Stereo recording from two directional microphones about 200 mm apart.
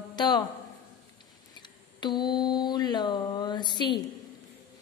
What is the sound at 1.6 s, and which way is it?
Mantra, 20° left (ahead or behind).